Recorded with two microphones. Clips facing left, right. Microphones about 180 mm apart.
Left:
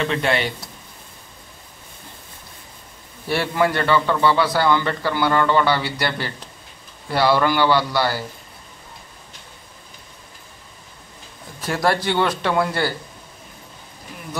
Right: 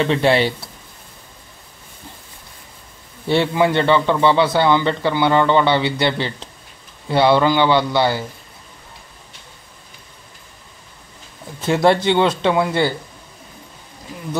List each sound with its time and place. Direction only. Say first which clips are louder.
0.0 s speech: right 5 dB; 30° right (ahead or behind)
3.3 s a man's voice: right 4 dB; 20° right (ahead or behind)
11.6 s a man's voice: right 6 dB; 25° right (ahead or behind)